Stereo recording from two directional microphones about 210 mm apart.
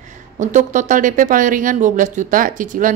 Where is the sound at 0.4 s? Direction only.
35° right (ahead or behind).